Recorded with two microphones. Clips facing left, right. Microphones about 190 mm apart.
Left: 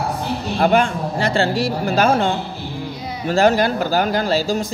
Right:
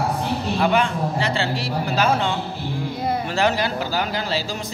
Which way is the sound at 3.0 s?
55° right (ahead or behind).